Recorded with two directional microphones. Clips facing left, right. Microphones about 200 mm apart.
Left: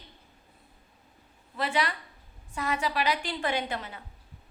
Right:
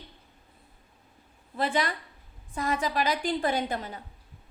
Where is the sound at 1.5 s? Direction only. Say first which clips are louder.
Right 2 dB; 45° right (ahead or behind).